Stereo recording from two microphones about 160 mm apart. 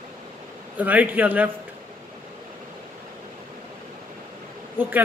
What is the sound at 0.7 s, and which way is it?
Speech, 10° right (ahead or behind).